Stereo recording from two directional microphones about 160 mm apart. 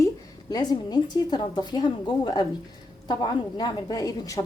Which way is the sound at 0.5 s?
25° left (ahead or behind).